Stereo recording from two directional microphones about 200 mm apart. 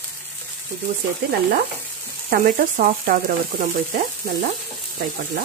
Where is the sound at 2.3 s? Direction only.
45° right (ahead or behind).